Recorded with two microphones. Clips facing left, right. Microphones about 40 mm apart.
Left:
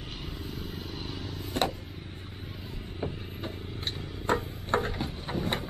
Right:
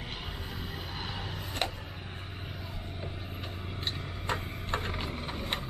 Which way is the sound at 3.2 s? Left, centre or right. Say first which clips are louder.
Left 2 dB; right.